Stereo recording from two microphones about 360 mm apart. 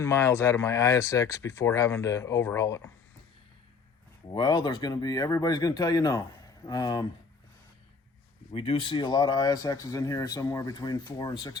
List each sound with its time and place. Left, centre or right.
0.0 s speech: centre
4.3 s speech: centre
8.5 s speech: centre